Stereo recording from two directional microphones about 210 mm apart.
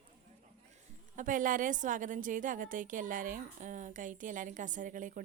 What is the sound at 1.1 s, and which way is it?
A woman's voice, 40° right (ahead or behind).